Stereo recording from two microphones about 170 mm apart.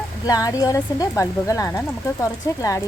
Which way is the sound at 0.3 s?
20° left (ahead or behind).